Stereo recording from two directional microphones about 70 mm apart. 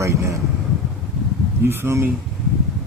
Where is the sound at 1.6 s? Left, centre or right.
Right.